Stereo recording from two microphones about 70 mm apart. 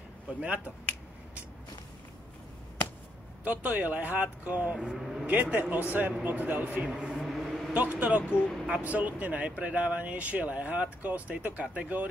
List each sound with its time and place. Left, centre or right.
0.3 s speech: centre
3.4 s speech: right
4.7 s speech: centre
5.2 s speech: right
6.9 s a sound: centre
7.7 s speech: right